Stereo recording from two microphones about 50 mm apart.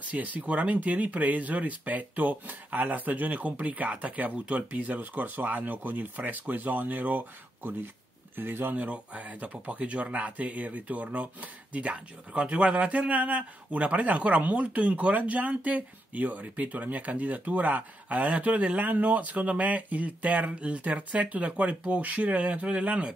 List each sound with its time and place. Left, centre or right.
0.0 s speech: right
8.4 s speech: right
8.7 s speech: right